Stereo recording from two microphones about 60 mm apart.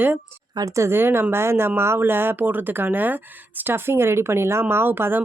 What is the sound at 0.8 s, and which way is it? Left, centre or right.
Speech, right.